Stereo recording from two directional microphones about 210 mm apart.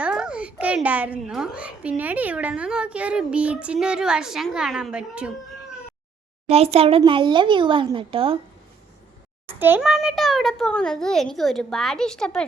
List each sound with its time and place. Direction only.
0.0 s a child's voice: 5° right (ahead or behind)
6.5 s a child's voice: 30° right (ahead or behind)
9.6 s a child's voice: 10° right (ahead or behind)